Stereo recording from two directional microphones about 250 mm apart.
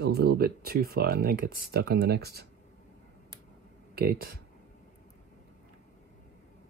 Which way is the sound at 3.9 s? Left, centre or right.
Right.